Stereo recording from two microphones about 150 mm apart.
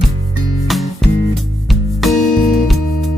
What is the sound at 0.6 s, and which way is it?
Music, centre (ahead or behind).